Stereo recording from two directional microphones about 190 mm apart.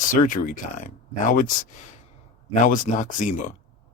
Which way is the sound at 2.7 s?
40° left (ahead or behind).